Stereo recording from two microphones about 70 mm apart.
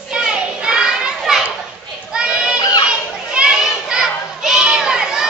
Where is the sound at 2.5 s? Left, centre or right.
Left.